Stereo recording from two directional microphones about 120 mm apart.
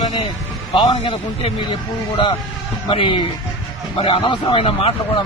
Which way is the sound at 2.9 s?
45° left (ahead or behind).